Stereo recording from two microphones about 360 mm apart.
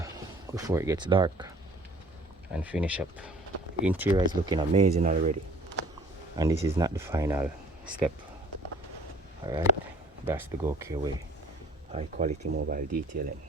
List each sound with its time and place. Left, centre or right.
0.0 s speech: centre
6.3 s speech: centre
9.4 s speech: centre
11.9 s speech: centre